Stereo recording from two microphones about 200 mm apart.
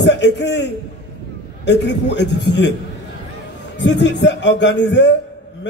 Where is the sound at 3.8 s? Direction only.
60° left (ahead or behind).